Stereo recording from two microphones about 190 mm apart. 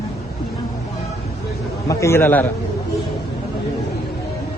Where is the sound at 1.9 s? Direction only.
15° left (ahead or behind).